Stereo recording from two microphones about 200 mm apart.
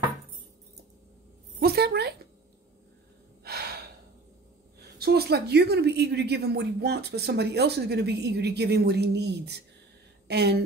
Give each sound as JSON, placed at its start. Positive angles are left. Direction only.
{"t": 1.6, "sound": "a sound", "side_deg": -50}
{"t": 3.4, "sound": "gasp", "side_deg": -50}
{"t": 4.9, "sound": "a woman's voice", "side_deg": -50}